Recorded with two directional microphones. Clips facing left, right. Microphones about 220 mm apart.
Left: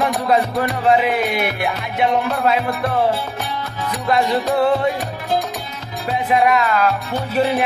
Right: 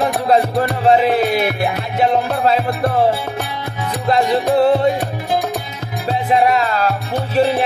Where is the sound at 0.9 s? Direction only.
35° right (ahead or behind).